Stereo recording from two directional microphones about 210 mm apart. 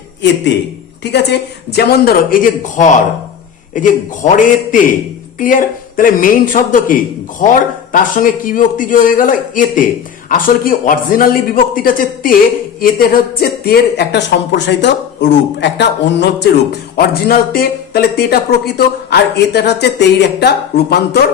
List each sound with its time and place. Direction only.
0.2 s a man's voice: 55° left (ahead or behind)